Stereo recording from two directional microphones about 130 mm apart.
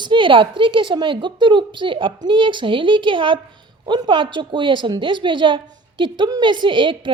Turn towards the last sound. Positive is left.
turn(degrees=-40)  # may be behind; listen again after turning